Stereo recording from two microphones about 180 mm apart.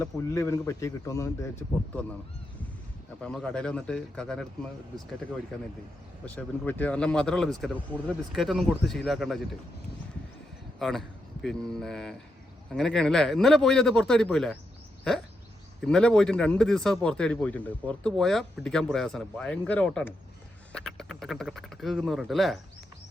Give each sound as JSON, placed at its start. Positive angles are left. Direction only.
{"t": 0.0, "sound": "a man's voice", "side_deg": 15}
{"t": 3.2, "sound": "speech", "side_deg": 5}
{"t": 6.2, "sound": "speech", "side_deg": 10}
{"t": 10.8, "sound": "speech", "side_deg": 0}
{"t": 15.8, "sound": "speech", "side_deg": 5}